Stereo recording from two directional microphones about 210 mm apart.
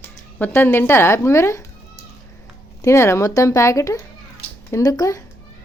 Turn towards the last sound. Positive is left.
turn(degrees=15)  # may be behind; listen again after turning